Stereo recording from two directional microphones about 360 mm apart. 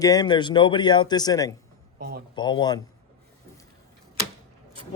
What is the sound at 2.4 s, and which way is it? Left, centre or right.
Speech, centre.